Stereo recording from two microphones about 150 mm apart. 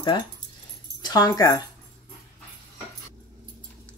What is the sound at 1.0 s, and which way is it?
Speech, 25° left (ahead or behind).